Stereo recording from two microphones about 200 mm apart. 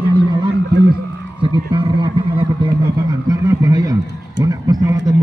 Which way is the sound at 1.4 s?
25° right (ahead or behind).